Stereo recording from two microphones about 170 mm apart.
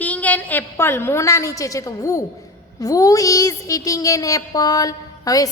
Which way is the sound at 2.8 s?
20° left (ahead or behind).